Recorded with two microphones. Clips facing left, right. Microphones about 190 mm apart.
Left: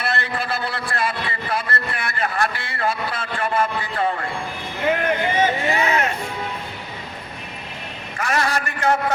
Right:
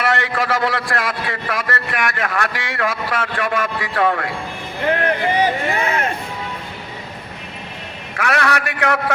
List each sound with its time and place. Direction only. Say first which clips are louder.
0.0 s a man's voice: right 5 dB; 85° right
5.4 s speech: right 1 dB; 30° right (ahead or behind)
8.1 s a man's voice: right 3 dB; 65° right (ahead or behind)